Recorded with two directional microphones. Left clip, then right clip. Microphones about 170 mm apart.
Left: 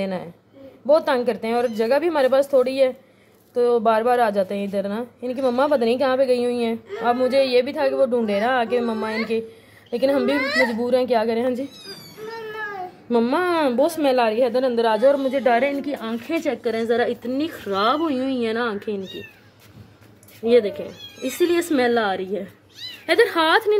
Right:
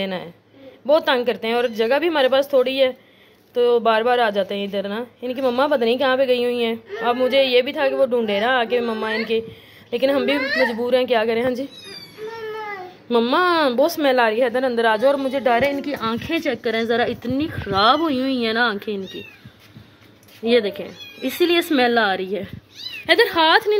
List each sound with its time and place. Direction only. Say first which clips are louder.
0.0 s a woman's voice: right 1 dB; centre (ahead or behind)
13.1 s a woman's voice: right 3 dB; 5° left (ahead or behind)
15.2 s a woman's voice: even; centre (ahead or behind)
20.4 s a woman's voice: left 1 dB; 5° left (ahead or behind)